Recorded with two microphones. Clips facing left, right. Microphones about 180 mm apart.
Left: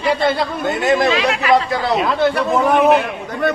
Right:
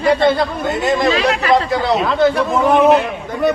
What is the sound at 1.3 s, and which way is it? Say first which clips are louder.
Speech: right 1 dB; 35° right (ahead or behind).